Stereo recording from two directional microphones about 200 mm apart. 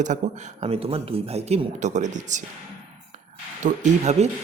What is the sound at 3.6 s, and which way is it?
Speech, 35° right (ahead or behind).